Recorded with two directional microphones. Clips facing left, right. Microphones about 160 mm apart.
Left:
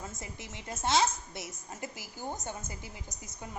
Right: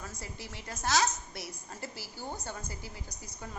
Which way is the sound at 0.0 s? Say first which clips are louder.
Left 1 dB; 20° left (ahead or behind).